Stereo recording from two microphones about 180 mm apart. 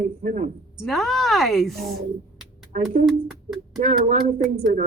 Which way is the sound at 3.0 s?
Centre (ahead or behind).